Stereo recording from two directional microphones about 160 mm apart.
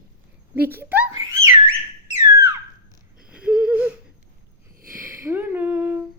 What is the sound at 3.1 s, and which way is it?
Wheeze, 5° right (ahead or behind).